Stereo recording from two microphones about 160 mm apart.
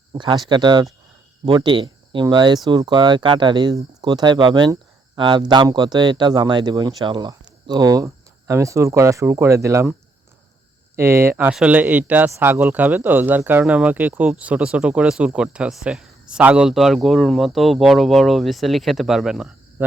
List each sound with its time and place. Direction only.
0.1 s speech: 25° right (ahead or behind)
10.9 s speech: 15° right (ahead or behind)